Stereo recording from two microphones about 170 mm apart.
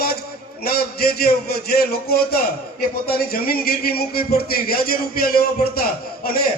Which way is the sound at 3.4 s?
60° left (ahead or behind).